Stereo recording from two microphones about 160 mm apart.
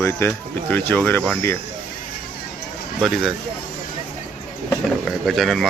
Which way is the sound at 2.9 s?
Centre (ahead or behind).